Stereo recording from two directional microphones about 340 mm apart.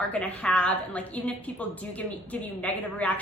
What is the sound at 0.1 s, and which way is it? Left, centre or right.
A woman's voice, centre.